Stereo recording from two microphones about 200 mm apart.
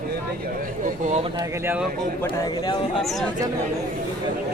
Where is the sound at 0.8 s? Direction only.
35° right (ahead or behind).